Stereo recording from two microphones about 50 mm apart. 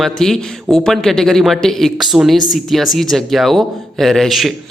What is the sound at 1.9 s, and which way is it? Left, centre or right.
Speech, centre.